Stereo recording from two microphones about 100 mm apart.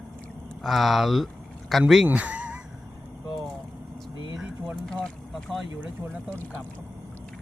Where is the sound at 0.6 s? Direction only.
Centre (ahead or behind).